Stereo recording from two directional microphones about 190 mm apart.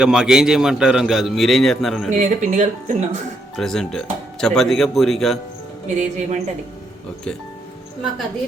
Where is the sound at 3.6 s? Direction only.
5° left (ahead or behind).